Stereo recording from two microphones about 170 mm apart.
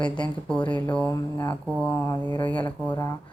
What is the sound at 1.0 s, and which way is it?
A woman's voice, 20° left (ahead or behind).